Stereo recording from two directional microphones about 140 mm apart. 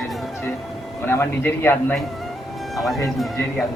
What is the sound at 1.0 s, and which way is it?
Speech, 15° left (ahead or behind).